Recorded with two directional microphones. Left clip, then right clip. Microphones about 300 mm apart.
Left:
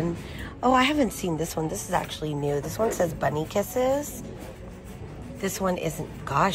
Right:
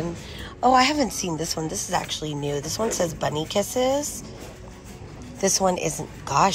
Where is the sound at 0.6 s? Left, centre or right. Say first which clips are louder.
Right 3 dB; centre.